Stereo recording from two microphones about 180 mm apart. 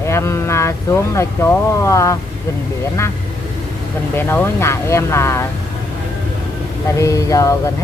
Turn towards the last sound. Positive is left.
turn(degrees=20)  # may be behind; listen again after turning